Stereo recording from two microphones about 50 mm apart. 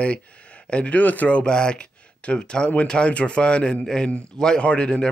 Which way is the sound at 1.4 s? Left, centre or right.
Centre.